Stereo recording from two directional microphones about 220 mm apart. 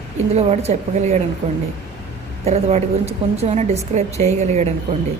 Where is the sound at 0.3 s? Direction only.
30° right (ahead or behind).